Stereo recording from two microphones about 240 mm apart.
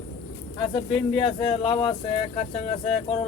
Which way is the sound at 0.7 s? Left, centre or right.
Left.